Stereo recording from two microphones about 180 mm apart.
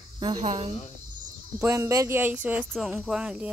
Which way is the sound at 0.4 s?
40° right (ahead or behind).